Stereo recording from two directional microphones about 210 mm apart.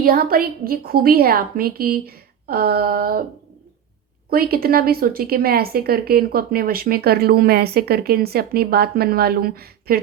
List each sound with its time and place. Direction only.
0.0 s a woman's voice: 45° right (ahead or behind)
4.3 s a woman's voice: 45° right (ahead or behind)